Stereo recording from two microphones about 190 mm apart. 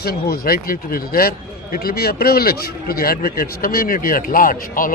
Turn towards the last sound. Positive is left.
turn(degrees=45)  # may be behind; listen again after turning